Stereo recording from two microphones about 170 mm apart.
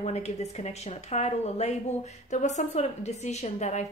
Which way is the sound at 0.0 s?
40° left (ahead or behind).